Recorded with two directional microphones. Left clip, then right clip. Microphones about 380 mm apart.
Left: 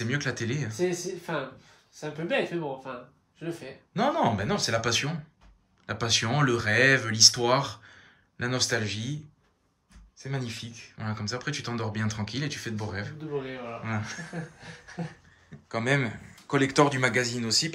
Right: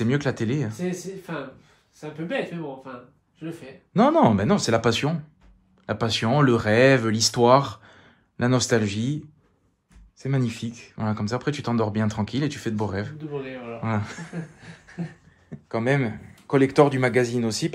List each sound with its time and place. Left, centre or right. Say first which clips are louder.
0.0 s speech: right 5 dB; centre
0.7 s speech: left 2 dB; left
3.9 s speech: right 7 dB; centre
15.7 s speech: right 3 dB; centre